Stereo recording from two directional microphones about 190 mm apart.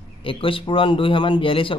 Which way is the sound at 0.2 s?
25° left (ahead or behind).